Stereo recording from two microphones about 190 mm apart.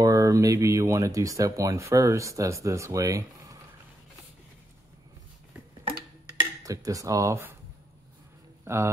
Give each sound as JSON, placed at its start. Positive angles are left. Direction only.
{"t": 0.0, "sound": "speech", "side_deg": -20}
{"t": 6.6, "sound": "speech", "side_deg": -15}
{"t": 8.6, "sound": "speech", "side_deg": -15}